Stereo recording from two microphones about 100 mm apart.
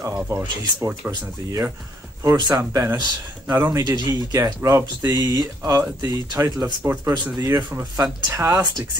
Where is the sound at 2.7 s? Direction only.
30° right (ahead or behind).